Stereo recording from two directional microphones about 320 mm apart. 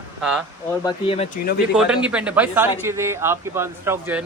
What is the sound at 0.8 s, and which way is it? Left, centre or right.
Speech, centre.